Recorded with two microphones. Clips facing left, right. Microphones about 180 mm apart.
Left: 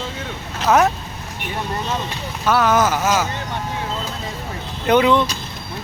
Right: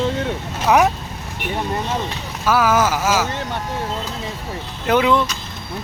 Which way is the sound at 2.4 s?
5° right (ahead or behind).